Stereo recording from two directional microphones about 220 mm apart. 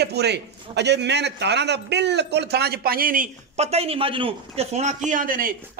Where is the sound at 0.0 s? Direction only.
50° right (ahead or behind).